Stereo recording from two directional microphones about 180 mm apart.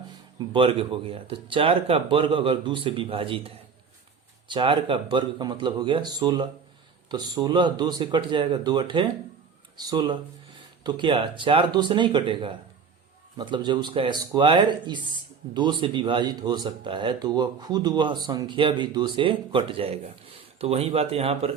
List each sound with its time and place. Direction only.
0.3 s speech: 30° right (ahead or behind)